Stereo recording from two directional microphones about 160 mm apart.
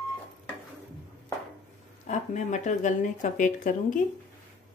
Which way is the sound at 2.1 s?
50° left (ahead or behind).